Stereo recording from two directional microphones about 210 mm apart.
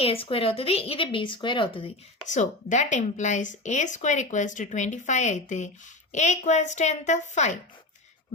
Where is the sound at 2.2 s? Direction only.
35° left (ahead or behind).